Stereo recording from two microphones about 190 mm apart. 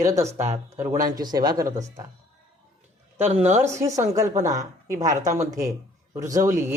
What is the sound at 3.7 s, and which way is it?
A woman's voice, 15° right (ahead or behind).